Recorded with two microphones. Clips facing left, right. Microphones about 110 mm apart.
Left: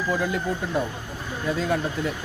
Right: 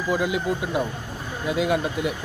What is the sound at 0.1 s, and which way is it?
A man's voice, 10° right (ahead or behind).